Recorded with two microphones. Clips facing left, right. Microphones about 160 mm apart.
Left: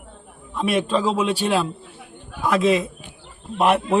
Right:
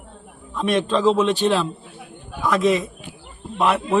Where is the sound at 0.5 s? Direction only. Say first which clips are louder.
Right 1 dB; 10° left (ahead or behind).